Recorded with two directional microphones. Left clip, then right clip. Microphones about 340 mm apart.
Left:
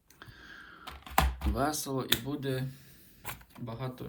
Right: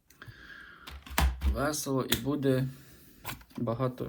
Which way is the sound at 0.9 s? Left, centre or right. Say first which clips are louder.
Left 3 dB; left.